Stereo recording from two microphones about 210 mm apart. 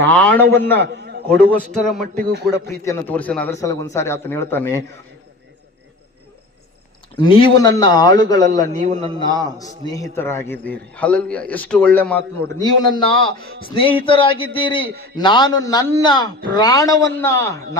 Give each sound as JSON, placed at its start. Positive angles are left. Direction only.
{"t": 0.0, "sound": "a sound", "side_deg": 5}
{"t": 0.5, "sound": "a man's voice", "side_deg": 10}
{"t": 0.9, "sound": "a sound", "side_deg": -50}
{"t": 1.5, "sound": "speech", "side_deg": 5}
{"t": 2.2, "sound": "a man's voice", "side_deg": -50}
{"t": 2.8, "sound": "a man's voice", "side_deg": 10}
{"t": 7.2, "sound": "a man's voice", "side_deg": 25}
{"t": 8.7, "sound": "a man's voice", "side_deg": -35}
{"t": 9.1, "sound": "a man's voice", "side_deg": 20}
{"t": 12.6, "sound": "a man's voice", "side_deg": 20}